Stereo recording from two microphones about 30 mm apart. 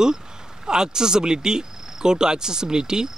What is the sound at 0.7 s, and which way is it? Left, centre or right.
Speech, right.